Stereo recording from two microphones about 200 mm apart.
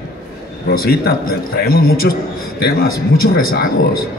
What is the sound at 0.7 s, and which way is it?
A man's voice, 50° left (ahead or behind).